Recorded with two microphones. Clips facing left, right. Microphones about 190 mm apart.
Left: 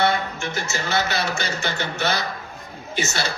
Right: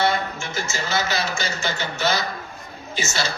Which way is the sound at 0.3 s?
60° left (ahead or behind).